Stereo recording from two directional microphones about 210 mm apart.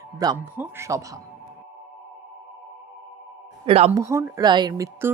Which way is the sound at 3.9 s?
15° right (ahead or behind).